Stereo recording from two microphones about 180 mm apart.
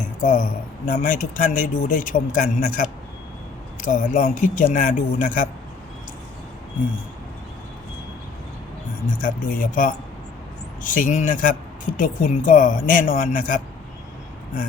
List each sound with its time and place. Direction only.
0.0 s speech: 50° left (ahead or behind)
9.1 s speech: 50° left (ahead or behind)